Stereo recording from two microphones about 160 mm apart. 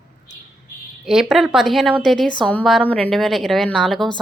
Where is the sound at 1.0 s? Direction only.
5° right (ahead or behind).